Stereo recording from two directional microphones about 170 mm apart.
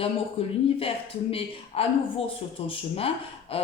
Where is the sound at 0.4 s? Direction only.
35° left (ahead or behind).